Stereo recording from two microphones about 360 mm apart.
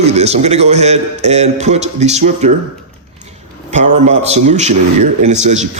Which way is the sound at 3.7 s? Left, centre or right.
Centre.